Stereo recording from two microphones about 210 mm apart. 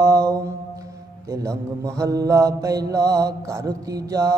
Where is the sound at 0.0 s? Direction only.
15° right (ahead or behind).